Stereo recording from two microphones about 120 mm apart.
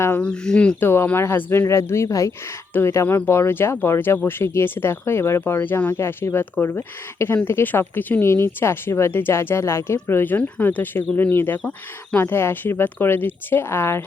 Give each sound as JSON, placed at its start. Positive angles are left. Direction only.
{"t": 0.2, "sound": "speech", "side_deg": 10}